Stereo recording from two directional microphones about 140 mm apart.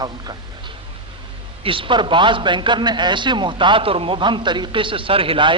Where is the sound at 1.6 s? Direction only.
40° right (ahead or behind).